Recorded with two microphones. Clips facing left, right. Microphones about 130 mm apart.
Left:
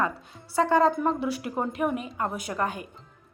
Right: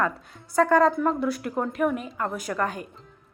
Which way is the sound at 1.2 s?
5° left (ahead or behind).